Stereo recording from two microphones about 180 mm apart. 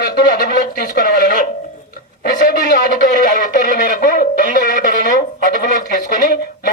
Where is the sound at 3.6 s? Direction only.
50° left (ahead or behind).